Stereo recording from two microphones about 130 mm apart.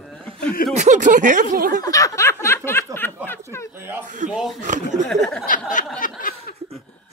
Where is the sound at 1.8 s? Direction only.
25° left (ahead or behind).